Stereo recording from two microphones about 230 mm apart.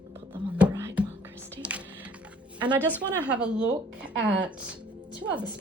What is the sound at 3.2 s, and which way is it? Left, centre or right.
Speech, centre.